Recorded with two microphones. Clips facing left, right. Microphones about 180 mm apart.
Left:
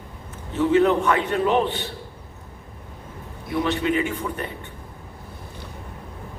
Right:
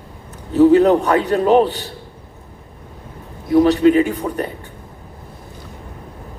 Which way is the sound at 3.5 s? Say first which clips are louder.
Right 11 dB; 40° right (ahead or behind).